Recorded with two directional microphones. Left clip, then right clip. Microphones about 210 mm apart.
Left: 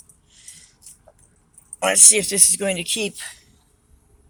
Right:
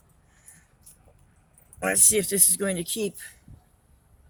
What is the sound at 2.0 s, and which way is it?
Speech, 5° right (ahead or behind).